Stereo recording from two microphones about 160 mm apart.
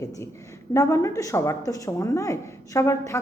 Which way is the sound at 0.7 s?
20° left (ahead or behind).